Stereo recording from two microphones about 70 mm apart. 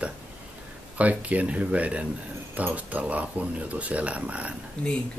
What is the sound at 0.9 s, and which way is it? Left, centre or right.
Speech, right.